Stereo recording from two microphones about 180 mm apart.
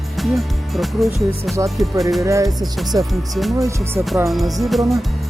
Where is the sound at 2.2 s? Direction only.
15° right (ahead or behind).